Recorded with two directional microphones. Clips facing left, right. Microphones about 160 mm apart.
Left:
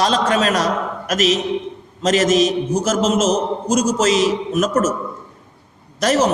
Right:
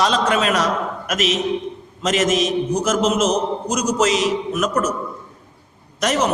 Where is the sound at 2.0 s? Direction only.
35° left (ahead or behind).